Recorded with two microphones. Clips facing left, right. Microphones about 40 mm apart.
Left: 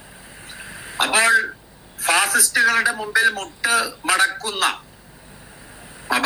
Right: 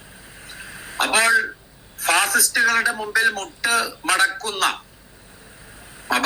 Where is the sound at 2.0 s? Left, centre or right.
Left.